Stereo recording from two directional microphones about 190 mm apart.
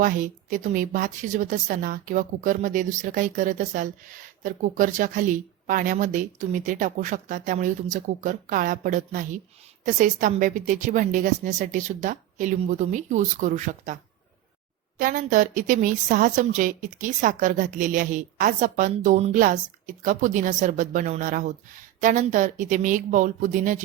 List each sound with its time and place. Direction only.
0.0 s a woman's voice: 45° right (ahead or behind)